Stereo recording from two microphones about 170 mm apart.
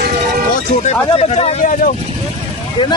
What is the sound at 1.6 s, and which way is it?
Speech, 50° left (ahead or behind).